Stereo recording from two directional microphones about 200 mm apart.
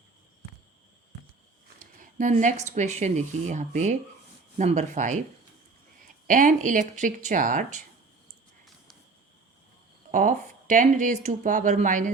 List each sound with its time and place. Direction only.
2.0 s speech: 40° right (ahead or behind)
6.2 s speech: 40° right (ahead or behind)
10.1 s speech: 40° right (ahead or behind)